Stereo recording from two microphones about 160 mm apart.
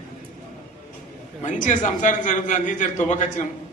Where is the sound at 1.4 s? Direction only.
50° left (ahead or behind).